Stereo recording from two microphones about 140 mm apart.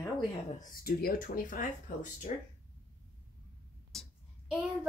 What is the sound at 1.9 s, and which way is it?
Speech, 70° left (ahead or behind).